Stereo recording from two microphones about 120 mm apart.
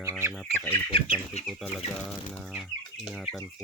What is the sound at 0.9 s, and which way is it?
Speech, 50° left (ahead or behind).